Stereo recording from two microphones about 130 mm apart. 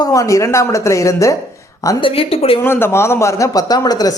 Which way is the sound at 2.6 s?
15° left (ahead or behind).